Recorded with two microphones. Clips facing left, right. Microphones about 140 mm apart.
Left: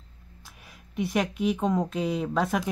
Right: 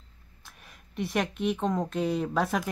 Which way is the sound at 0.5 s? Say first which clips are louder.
Even; 5° left (ahead or behind).